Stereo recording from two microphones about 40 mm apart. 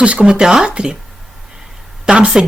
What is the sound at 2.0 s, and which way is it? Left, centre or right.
Speech, right.